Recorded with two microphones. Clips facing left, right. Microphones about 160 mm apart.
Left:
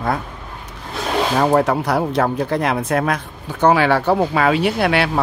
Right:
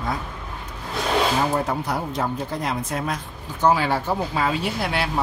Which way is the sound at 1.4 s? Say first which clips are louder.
Left 7 dB; 75° left (ahead or behind).